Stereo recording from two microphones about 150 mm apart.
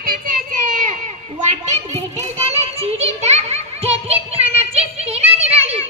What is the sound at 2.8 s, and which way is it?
Children playing, 45° right (ahead or behind).